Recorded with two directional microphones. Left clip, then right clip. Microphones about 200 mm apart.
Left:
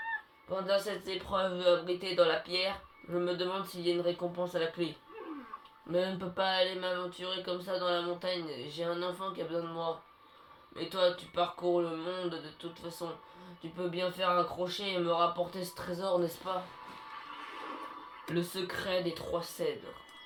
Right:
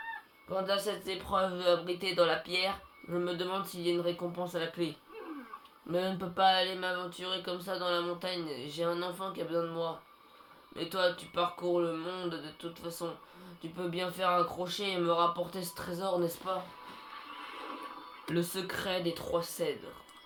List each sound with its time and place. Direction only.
0.5 s speech: 35° right (ahead or behind)
5.9 s speech: 40° right (ahead or behind)
18.3 s speech: 45° right (ahead or behind)